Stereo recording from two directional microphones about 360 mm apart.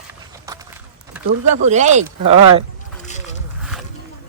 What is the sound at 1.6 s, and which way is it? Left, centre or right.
Speech, centre.